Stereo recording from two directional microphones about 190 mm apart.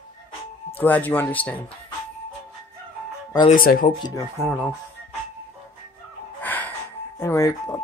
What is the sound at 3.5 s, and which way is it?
Speech, 45° left (ahead or behind).